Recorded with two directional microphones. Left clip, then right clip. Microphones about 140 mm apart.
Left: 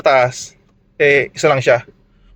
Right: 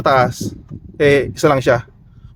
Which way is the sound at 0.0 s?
35° right (ahead or behind).